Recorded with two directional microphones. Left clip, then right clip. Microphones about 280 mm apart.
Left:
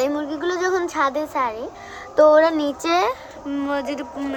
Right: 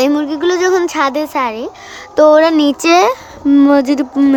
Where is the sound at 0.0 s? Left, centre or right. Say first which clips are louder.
Right 9 dB; right.